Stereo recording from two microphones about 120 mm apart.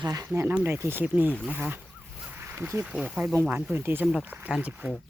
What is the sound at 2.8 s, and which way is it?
Speech, 10° right (ahead or behind).